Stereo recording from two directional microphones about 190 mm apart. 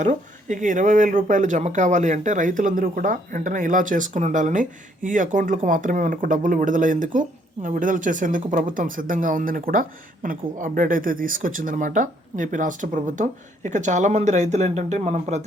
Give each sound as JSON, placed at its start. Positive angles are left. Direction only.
{"t": 0.0, "sound": "speech", "side_deg": -40}